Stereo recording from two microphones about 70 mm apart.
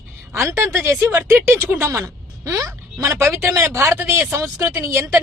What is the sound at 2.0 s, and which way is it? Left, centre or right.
A woman's voice, right.